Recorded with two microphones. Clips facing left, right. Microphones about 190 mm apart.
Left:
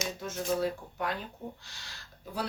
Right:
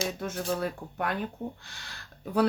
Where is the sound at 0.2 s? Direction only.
60° right (ahead or behind).